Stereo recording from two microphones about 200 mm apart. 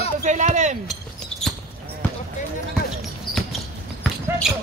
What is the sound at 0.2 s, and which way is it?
Speech, 35° right (ahead or behind).